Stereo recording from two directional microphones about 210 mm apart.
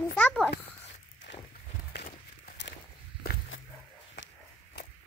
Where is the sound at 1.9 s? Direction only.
45° left (ahead or behind).